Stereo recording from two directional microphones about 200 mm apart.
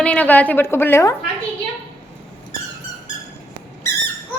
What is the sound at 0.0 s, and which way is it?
A woman's voice, 5° left (ahead or behind).